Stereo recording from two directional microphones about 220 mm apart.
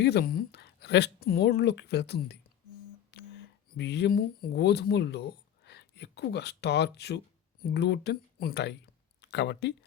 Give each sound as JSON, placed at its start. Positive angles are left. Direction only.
{"t": 0.0, "sound": "speech", "side_deg": 50}